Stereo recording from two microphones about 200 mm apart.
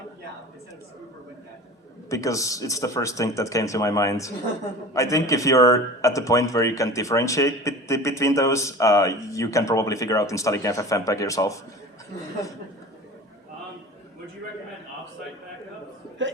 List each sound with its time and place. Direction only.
2.0 s a man's voice: 15° left (ahead or behind)